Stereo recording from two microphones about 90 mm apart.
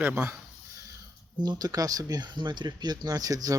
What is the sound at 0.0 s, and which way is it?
Speech, 25° right (ahead or behind).